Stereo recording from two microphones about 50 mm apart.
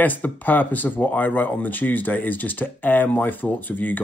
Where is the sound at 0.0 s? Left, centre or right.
Left.